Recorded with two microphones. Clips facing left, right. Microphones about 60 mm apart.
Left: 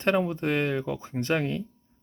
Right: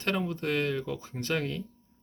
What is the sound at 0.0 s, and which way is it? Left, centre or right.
Speech, left.